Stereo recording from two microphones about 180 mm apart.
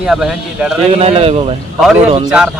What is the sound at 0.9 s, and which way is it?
Speech, 30° right (ahead or behind).